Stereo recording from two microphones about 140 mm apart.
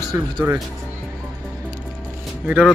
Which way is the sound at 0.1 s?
20° right (ahead or behind).